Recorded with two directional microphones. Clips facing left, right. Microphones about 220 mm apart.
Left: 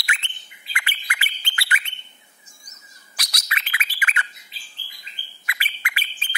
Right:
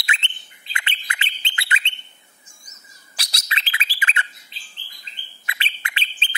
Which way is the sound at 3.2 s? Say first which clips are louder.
Right 1 dB; 25° right (ahead or behind).